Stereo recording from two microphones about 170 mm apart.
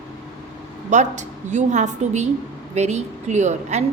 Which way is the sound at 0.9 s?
45° right (ahead or behind).